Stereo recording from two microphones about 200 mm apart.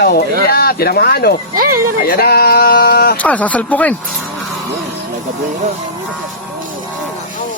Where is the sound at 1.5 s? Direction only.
45° right (ahead or behind).